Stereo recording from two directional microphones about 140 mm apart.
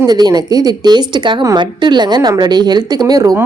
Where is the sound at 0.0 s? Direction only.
30° right (ahead or behind).